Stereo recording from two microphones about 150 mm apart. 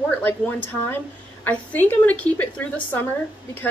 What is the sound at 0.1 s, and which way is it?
A woman's voice, 10° left (ahead or behind).